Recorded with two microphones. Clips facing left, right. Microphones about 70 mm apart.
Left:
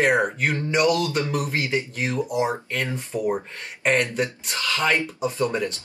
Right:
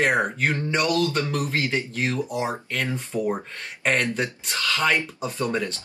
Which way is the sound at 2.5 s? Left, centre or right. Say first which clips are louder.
Left 1 dB; left.